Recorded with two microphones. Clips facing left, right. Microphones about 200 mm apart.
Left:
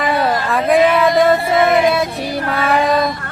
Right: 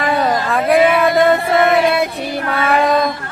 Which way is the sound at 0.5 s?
Centre (ahead or behind).